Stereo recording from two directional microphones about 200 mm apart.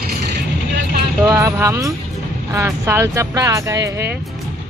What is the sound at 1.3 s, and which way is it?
Vehicle, 15° right (ahead or behind).